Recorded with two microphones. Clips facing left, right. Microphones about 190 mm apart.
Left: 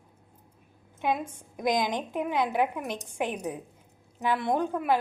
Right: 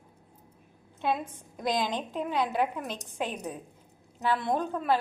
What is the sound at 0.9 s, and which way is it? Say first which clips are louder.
A woman's voice: left 1 dB; 15° left (ahead or behind).